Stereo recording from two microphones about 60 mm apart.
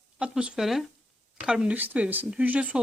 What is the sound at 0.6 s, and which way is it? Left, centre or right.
Speech, centre.